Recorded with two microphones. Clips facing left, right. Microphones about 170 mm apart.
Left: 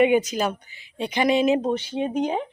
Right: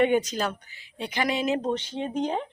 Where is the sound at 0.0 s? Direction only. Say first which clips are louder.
Left 4 dB; 10° left (ahead or behind).